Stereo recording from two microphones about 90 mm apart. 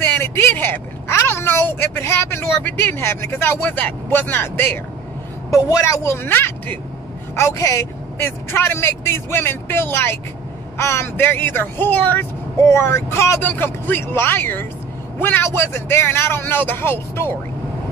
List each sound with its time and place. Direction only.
0.0 s speech: 25° left (ahead or behind)
5.5 s a woman's voice: 35° left (ahead or behind)
6.1 s speech: 25° left (ahead or behind)
7.3 s a woman's voice: 35° left (ahead or behind)
8.2 s speech: 25° left (ahead or behind)
13.4 s speech: 20° left (ahead or behind)